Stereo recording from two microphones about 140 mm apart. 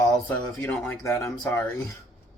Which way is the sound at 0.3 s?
15° left (ahead or behind).